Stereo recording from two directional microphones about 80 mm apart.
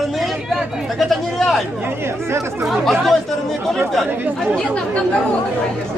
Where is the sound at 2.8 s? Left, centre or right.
Centre.